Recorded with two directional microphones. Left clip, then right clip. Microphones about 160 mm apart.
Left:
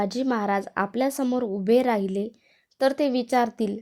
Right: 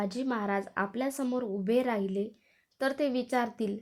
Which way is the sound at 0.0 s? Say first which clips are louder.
Left 7 dB; 50° left (ahead or behind).